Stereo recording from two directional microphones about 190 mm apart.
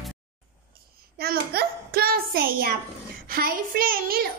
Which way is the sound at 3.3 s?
50° right (ahead or behind).